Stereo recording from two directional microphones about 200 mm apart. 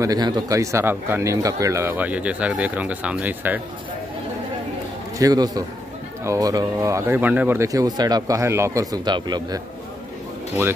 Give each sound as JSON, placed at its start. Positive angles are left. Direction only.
{"t": 0.0, "sound": "speech", "side_deg": -15}
{"t": 5.2, "sound": "a man's voice", "side_deg": -20}